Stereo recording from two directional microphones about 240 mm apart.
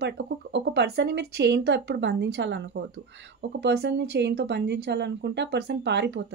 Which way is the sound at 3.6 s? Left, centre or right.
Right.